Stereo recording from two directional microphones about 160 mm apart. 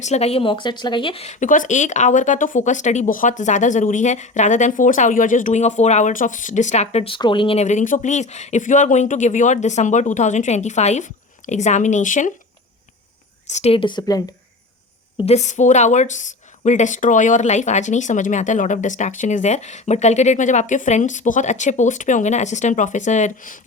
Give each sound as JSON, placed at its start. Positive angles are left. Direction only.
{"t": 0.0, "sound": "speech", "side_deg": 45}
{"t": 13.5, "sound": "a woman's voice", "side_deg": 40}
{"t": 15.2, "sound": "speech", "side_deg": 45}